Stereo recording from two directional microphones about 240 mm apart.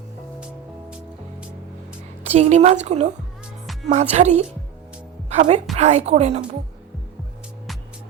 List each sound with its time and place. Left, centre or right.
0.3 s music: centre
2.2 s a woman's voice: right